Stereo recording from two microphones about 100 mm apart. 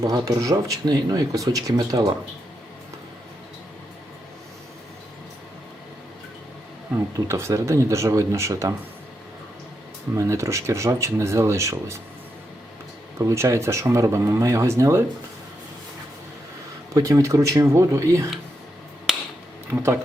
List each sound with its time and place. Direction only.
0.0 s speech: 35° right (ahead or behind)
7.3 s speech: 30° right (ahead or behind)
10.2 s speech: 30° right (ahead or behind)
13.1 s speech: 30° right (ahead or behind)
16.9 s speech: 35° right (ahead or behind)
19.1 s finger snapping: 5° right (ahead or behind)